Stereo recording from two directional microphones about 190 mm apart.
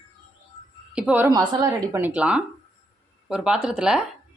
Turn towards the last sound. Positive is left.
turn(degrees=-5)  # may be behind; listen again after turning